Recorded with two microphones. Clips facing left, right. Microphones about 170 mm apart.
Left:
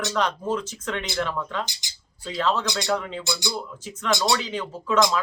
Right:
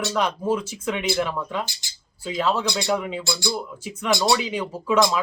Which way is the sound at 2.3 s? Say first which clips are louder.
Right 1 dB; 10° right (ahead or behind).